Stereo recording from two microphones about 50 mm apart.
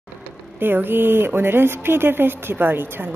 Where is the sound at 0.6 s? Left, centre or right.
Right.